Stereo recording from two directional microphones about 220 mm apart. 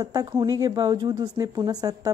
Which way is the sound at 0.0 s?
15° right (ahead or behind).